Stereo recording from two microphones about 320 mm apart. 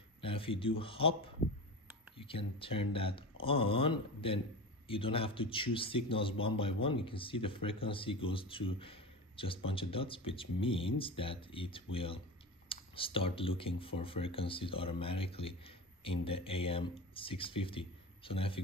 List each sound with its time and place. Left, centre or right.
0.2 s a man's voice: centre